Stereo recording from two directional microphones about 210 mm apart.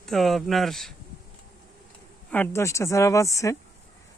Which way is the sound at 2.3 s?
10° left (ahead or behind).